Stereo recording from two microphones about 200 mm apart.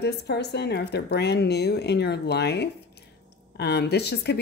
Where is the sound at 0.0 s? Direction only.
55° left (ahead or behind).